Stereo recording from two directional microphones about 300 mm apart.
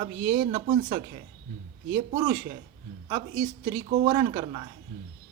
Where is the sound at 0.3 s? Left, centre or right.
Centre.